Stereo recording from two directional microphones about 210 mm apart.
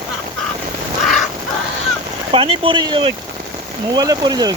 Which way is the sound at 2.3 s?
25° right (ahead or behind).